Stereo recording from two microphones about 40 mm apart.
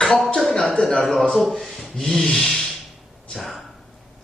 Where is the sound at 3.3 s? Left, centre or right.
Centre.